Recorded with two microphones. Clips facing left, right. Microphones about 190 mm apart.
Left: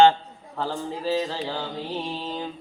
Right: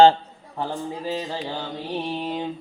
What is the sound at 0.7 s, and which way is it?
Speech, 15° right (ahead or behind).